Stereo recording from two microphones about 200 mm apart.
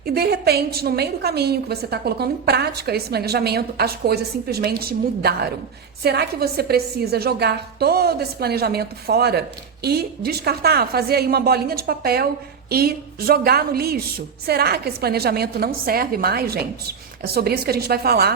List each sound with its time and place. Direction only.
0.0 s a woman's voice: 50° right (ahead or behind)